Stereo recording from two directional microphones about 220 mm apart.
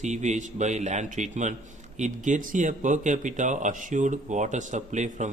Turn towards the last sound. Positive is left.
turn(degrees=-35)  # may be behind; listen again after turning